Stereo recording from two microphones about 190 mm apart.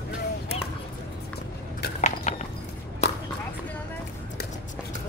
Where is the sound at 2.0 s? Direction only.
40° left (ahead or behind).